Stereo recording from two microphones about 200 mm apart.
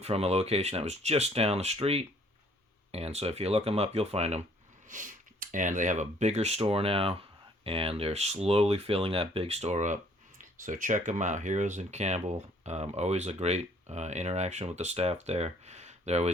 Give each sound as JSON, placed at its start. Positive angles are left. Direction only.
{"t": 0.0, "sound": "speech", "side_deg": -30}